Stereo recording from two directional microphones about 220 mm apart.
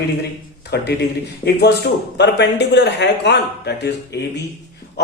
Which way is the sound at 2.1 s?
50° left (ahead or behind).